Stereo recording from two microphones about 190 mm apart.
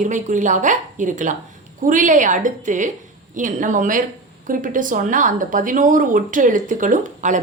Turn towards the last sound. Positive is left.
turn(degrees=-40)  # may be behind; listen again after turning